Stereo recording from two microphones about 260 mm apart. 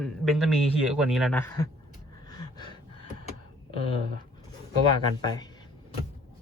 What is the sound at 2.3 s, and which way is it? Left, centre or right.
Gasp, centre.